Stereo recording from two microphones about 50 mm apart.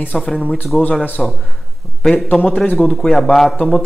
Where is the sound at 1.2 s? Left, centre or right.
Centre.